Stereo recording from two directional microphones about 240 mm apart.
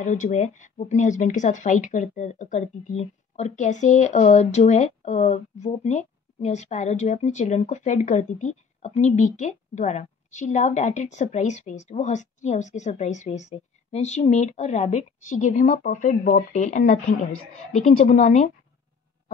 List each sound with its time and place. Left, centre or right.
0.0 s speech: left